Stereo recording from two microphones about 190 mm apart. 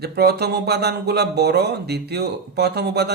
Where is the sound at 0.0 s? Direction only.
60° right (ahead or behind).